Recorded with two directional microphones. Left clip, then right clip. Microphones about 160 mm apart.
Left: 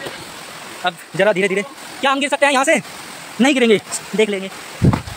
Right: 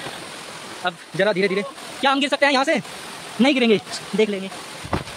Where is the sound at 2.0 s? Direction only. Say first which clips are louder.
Left 2 dB; 10° right (ahead or behind).